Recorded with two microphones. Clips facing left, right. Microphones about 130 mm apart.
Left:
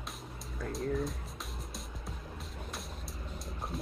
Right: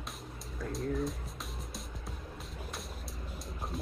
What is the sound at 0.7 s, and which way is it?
Music, centre (ahead or behind).